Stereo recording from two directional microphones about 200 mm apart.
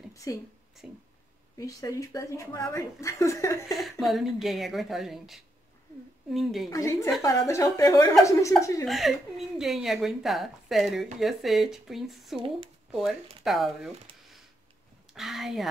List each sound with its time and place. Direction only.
0.1 s a sound: 15° left (ahead or behind)
0.8 s a woman's voice: 5° right (ahead or behind)
1.6 s a woman's voice: 15° left (ahead or behind)
4.0 s a woman's voice: centre (ahead or behind)
6.7 s a woman's voice: 15° left (ahead or behind)
8.8 s a woman's voice: centre (ahead or behind)
12.4 s speech: 25° right (ahead or behind)
12.9 s a woman's voice: centre (ahead or behind)
14.1 s a sound: 25° right (ahead or behind)
15.1 s a woman's voice: centre (ahead or behind)